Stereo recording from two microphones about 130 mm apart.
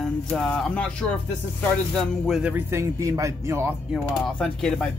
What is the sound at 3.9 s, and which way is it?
Speech, 5° left (ahead or behind).